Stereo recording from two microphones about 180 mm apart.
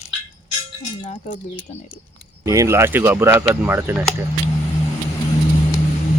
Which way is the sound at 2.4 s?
20° right (ahead or behind).